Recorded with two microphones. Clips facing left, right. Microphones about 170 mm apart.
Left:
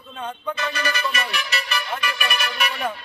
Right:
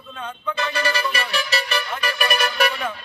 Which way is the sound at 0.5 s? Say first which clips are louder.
Right 5 dB; 30° right (ahead or behind).